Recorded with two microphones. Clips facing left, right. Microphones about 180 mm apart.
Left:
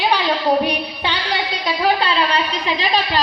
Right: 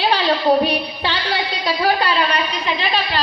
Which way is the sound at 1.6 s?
25° left (ahead or behind).